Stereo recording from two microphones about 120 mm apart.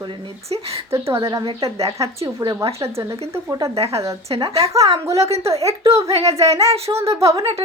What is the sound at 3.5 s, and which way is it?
Speech, 30° right (ahead or behind).